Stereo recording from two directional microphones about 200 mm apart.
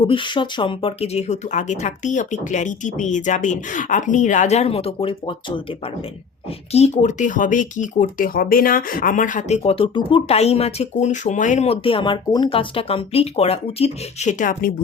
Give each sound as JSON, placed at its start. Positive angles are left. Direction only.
{"t": 0.0, "sound": "speech", "side_deg": 25}
{"t": 6.7, "sound": "speech", "side_deg": 30}